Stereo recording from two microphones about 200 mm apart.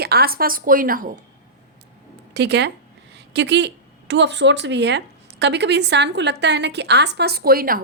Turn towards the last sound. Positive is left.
turn(degrees=-45)  # may be behind; listen again after turning